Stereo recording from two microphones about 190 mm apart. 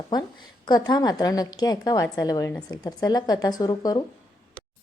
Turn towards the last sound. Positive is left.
turn(degrees=20)  # may be behind; listen again after turning